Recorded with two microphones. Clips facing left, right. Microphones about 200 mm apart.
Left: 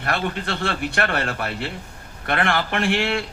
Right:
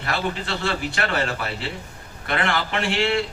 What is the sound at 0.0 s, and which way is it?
Speech, 55° left (ahead or behind).